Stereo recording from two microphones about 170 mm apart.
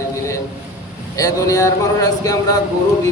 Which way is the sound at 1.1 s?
20° left (ahead or behind).